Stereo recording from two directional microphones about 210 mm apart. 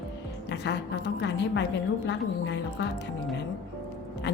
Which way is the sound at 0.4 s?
55° left (ahead or behind).